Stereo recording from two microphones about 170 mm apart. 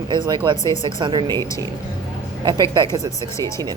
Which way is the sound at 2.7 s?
25° right (ahead or behind).